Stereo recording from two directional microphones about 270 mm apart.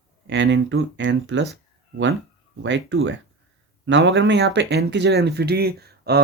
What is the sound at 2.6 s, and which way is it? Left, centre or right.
Speech, right.